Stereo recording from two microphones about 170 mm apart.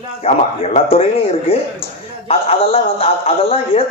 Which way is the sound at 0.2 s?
35° left (ahead or behind).